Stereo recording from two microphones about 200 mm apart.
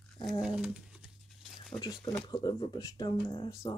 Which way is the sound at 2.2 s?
20° left (ahead or behind).